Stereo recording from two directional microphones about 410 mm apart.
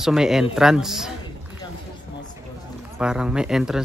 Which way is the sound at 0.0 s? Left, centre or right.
Centre.